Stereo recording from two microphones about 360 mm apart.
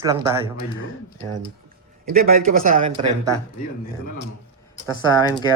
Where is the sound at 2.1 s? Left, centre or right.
Right.